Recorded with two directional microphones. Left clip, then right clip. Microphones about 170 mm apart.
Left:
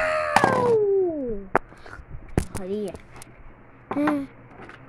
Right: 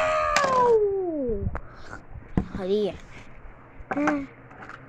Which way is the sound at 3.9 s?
20° left (ahead or behind).